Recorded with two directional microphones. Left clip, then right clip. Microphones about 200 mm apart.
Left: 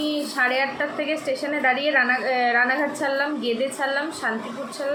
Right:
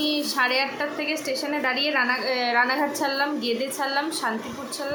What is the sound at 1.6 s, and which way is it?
A woman's voice, 15° right (ahead or behind).